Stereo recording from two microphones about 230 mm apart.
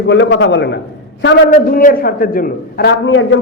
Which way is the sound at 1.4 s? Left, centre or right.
Left.